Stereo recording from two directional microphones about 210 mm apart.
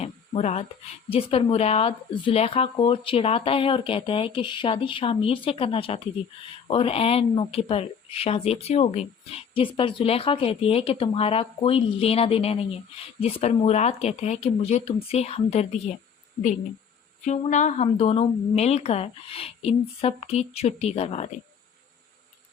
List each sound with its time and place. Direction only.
0.0 s a sound: 30° left (ahead or behind)
1.1 s speech: 30° left (ahead or behind)
17.2 s speech: 35° left (ahead or behind)